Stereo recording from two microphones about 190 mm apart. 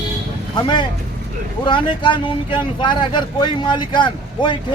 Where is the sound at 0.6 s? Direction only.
25° left (ahead or behind).